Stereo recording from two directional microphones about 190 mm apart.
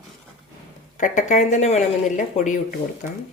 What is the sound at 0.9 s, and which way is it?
Speech, 40° left (ahead or behind).